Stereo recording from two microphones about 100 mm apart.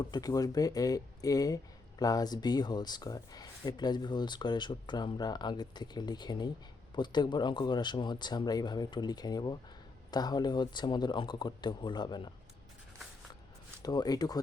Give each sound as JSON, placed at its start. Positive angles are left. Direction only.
{"t": 0.0, "sound": "speech", "side_deg": 40}
{"t": 13.8, "sound": "speech", "side_deg": 40}